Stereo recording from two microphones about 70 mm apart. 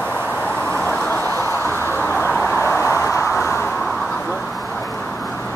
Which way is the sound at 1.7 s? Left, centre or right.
Left.